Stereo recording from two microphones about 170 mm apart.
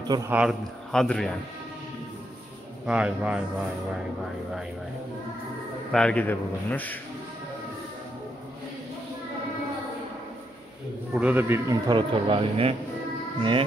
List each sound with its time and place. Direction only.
0.3 s a man's voice: 5° right (ahead or behind)
2.9 s a man's voice: 5° right (ahead or behind)
5.9 s a man's voice: 5° left (ahead or behind)
11.1 s a man's voice: 10° right (ahead or behind)
11.9 s speech: 30° right (ahead or behind)